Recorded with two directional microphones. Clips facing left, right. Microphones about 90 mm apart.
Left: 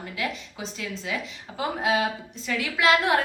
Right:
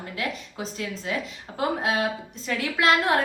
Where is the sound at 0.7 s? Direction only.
45° right (ahead or behind).